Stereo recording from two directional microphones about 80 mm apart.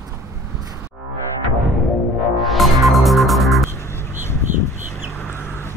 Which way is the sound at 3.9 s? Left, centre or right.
Left.